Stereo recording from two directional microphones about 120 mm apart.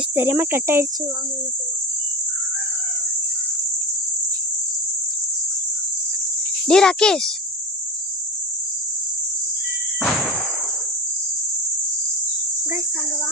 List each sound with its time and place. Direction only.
0.2 s speech: 20° right (ahead or behind)
6.7 s speech: 5° left (ahead or behind)
10.0 s a sound: 5° left (ahead or behind)